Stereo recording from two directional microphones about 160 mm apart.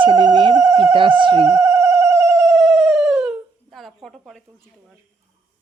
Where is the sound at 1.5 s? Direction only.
15° right (ahead or behind).